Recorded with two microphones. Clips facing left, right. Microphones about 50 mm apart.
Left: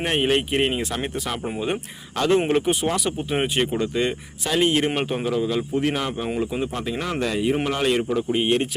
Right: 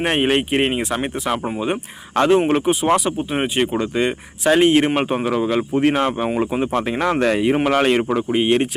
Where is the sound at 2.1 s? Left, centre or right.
Right.